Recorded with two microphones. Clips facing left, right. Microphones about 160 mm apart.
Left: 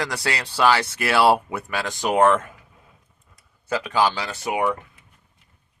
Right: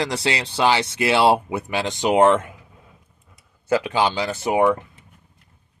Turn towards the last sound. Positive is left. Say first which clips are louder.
# right 5 dB
turn(degrees=-25)  # may be behind; listen again after turning